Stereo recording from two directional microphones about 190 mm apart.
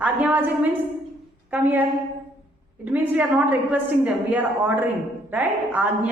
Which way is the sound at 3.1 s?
10° right (ahead or behind).